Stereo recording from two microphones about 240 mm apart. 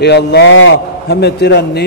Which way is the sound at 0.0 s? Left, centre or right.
Left.